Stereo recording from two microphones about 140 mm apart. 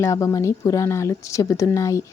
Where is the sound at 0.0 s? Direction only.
20° left (ahead or behind).